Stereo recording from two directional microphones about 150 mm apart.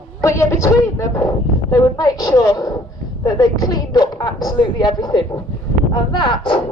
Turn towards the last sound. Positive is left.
turn(degrees=35)  # may be behind; listen again after turning